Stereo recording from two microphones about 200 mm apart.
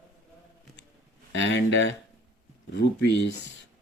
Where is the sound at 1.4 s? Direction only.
65° left (ahead or behind).